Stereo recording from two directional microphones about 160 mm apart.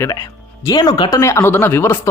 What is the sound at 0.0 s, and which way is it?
Speech, 20° left (ahead or behind).